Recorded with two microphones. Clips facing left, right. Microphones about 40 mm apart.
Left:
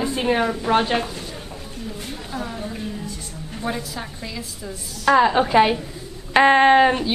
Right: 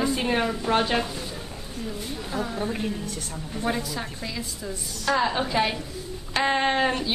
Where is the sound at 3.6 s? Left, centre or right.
Centre.